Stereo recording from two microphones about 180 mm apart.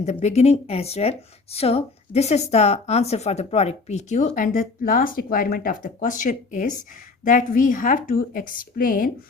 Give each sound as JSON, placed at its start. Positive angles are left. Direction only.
{"t": 0.0, "sound": "speech", "side_deg": 40}